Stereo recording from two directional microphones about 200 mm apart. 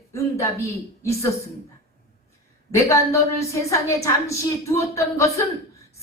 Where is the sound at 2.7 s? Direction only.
15° left (ahead or behind).